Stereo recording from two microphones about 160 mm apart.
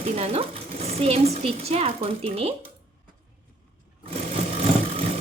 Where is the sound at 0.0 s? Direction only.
40° right (ahead or behind).